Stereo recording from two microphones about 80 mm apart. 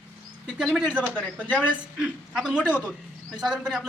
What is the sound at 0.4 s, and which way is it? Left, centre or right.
Speech, centre.